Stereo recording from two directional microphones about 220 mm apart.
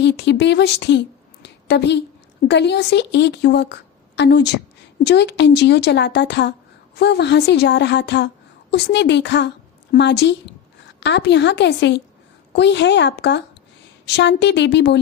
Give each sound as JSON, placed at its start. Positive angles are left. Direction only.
{"t": 0.0, "sound": "a woman's voice", "side_deg": 50}